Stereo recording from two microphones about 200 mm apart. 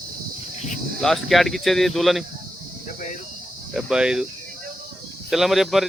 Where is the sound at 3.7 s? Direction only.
5° right (ahead or behind).